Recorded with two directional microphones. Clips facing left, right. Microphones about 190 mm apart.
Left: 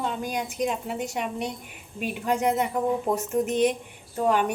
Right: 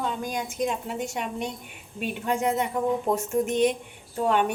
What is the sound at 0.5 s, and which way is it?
A woman's voice, 5° left (ahead or behind).